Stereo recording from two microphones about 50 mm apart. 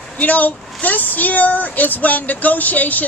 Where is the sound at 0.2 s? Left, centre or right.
Left.